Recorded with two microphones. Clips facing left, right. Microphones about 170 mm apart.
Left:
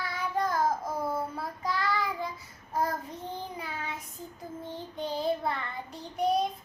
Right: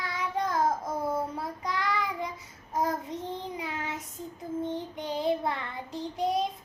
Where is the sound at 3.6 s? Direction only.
20° right (ahead or behind).